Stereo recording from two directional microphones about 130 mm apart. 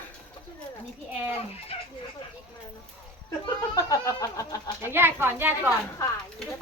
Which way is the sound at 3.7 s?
25° left (ahead or behind).